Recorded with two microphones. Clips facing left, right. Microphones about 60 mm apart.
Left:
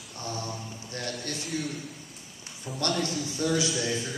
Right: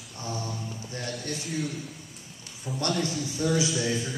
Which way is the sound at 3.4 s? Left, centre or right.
Centre.